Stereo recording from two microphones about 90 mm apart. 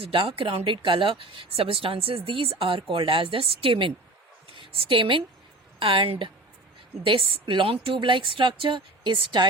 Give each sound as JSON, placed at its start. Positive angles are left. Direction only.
{"t": 0.0, "sound": "a woman's voice", "side_deg": -85}